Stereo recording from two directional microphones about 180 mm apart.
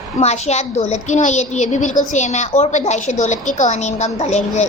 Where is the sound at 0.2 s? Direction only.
40° left (ahead or behind).